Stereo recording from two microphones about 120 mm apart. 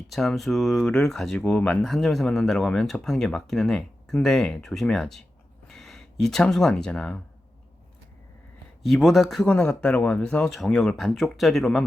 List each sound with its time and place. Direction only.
0.1 s speech: centre (ahead or behind)
8.9 s speech: centre (ahead or behind)